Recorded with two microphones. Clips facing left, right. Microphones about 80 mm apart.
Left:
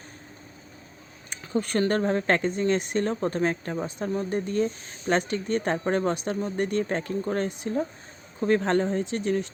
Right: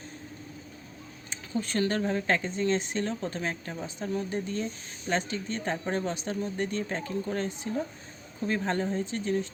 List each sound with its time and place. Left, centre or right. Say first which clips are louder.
1.3 s a sound: left 5 dB; left
1.9 s speech: left 5 dB; left
4.1 s speech: left 4 dB; left